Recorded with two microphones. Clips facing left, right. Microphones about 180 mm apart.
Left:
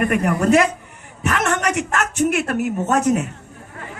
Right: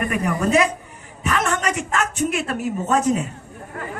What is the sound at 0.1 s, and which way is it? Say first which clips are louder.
A man's voice: left 3 dB; 65° left (ahead or behind).